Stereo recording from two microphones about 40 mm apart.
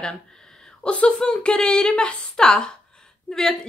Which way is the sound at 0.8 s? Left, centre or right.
Left.